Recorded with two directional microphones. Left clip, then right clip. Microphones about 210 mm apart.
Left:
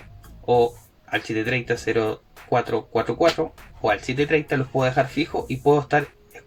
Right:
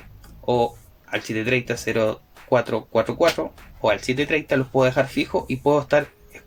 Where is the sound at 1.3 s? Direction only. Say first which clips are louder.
Right 2 dB; 40° right (ahead or behind).